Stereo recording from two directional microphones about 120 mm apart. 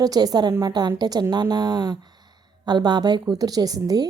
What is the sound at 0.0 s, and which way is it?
A woman's voice, 30° right (ahead or behind).